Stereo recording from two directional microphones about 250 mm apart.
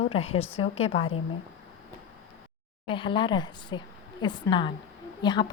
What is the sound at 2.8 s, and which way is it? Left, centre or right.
A woman's voice, centre.